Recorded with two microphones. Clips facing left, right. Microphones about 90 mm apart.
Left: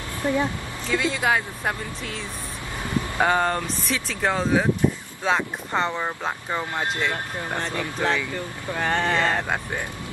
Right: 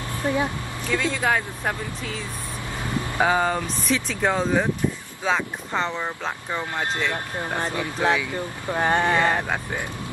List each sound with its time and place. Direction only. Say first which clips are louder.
0.2 s speech: left 1 dB; 20° right (ahead or behind)
0.9 s speech: left 1 dB; 10° left (ahead or behind)
7.5 s speech: right 1 dB; 15° right (ahead or behind)